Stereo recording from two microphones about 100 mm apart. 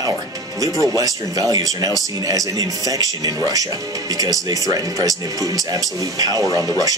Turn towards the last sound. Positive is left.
turn(degrees=-35)  # may be behind; listen again after turning